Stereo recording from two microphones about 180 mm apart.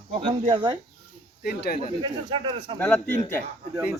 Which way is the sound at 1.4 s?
60° left (ahead or behind).